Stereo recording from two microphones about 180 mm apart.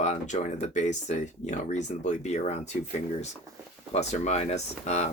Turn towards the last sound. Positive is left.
turn(degrees=40)  # may be behind; listen again after turning